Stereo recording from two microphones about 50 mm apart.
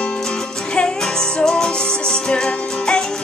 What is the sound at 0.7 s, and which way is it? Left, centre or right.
Music, centre.